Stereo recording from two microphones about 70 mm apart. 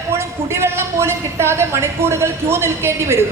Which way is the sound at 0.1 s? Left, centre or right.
Right.